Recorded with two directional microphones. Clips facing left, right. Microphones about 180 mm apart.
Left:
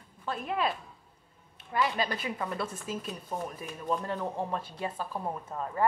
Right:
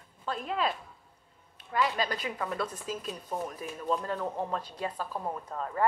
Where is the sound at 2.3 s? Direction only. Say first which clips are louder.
Right 1 dB; 10° left (ahead or behind).